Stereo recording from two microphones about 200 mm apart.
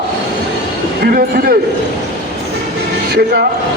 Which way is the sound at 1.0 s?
45° right (ahead or behind).